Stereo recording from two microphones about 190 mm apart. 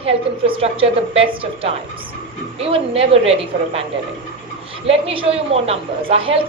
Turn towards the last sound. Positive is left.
turn(degrees=-30)  # may be behind; listen again after turning